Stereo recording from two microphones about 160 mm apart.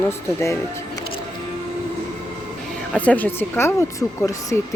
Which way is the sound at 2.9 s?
10° left (ahead or behind).